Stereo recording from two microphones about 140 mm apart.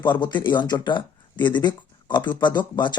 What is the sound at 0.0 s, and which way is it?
Speech, 30° left (ahead or behind).